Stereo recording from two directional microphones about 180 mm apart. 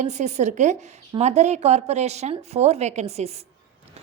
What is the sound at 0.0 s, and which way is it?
A woman's voice, 40° right (ahead or behind).